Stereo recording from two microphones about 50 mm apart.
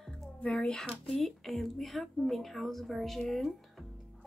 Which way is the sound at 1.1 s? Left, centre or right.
Centre.